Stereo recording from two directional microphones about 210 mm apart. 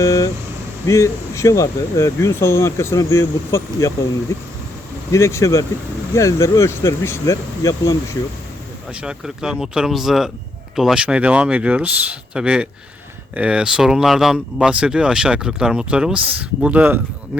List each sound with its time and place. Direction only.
0.0 s vehicle: 15° left (ahead or behind)
0.9 s speech: 15° left (ahead or behind)
8.9 s speech: 5° right (ahead or behind)